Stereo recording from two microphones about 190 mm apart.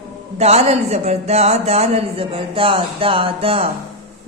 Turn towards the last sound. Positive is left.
turn(degrees=-30)  # may be behind; listen again after turning